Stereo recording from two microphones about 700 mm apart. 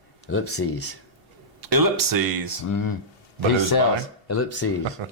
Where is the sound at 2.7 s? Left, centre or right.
Left.